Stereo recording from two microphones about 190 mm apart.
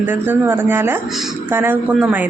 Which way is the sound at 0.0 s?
10° right (ahead or behind).